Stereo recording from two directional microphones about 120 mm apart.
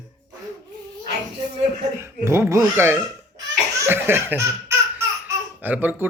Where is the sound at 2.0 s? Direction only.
20° right (ahead or behind).